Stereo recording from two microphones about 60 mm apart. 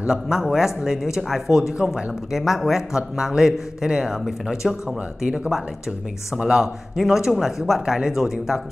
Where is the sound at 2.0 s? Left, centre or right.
Centre.